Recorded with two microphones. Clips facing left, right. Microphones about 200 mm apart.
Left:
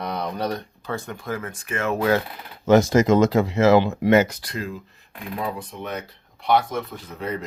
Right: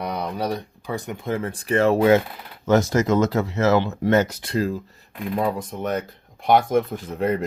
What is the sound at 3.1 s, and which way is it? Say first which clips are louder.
Speech: left 3 dB; 15° left (ahead or behind).